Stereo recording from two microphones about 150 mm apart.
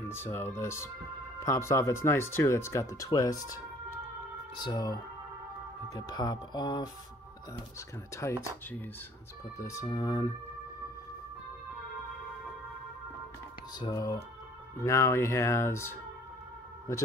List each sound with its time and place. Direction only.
0.1 s speech: 15° left (ahead or behind)
4.6 s speech: 25° left (ahead or behind)
8.1 s speech: 20° left (ahead or behind)
9.6 s speech: 20° left (ahead or behind)
13.7 s speech: 25° left (ahead or behind)